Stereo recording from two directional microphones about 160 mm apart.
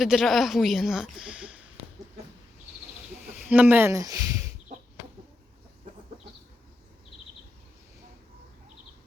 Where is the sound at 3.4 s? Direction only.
10° right (ahead or behind).